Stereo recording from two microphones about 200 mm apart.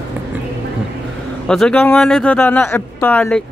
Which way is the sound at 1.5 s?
5° left (ahead or behind).